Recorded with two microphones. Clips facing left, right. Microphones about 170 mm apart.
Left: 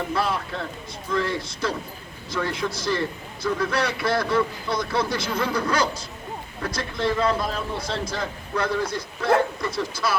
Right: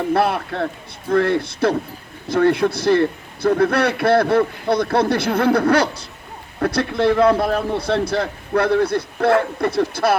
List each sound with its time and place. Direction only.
0.1 s a man's voice: 65° right (ahead or behind)